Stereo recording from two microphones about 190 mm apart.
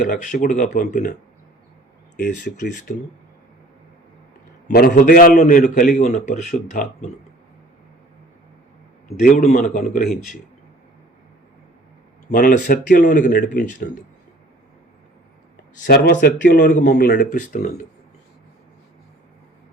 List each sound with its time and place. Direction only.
0.0 s speech: 45° left (ahead or behind)
2.4 s speech: 45° left (ahead or behind)
4.7 s speech: 55° left (ahead or behind)
9.2 s speech: 40° left (ahead or behind)
12.3 s speech: 45° left (ahead or behind)
15.8 s speech: 55° left (ahead or behind)
16.6 s speech: 45° left (ahead or behind)